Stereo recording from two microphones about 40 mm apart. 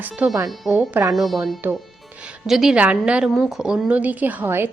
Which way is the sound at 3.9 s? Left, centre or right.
Right.